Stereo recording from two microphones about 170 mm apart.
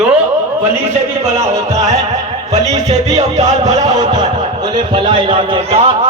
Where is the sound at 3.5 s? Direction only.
20° right (ahead or behind).